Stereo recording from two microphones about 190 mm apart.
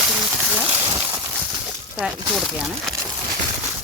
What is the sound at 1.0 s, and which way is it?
Clip-clop, 10° right (ahead or behind).